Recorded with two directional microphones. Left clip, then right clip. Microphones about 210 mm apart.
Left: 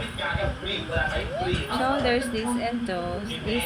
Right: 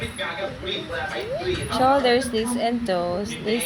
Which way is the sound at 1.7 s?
40° right (ahead or behind).